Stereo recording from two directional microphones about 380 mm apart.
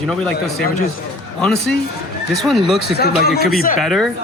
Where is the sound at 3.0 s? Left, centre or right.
Left.